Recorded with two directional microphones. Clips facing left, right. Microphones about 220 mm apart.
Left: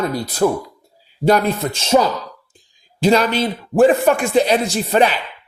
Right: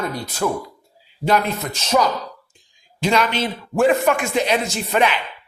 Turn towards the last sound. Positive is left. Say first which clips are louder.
# left 4 dB
turn(degrees=35)  # may be behind; listen again after turning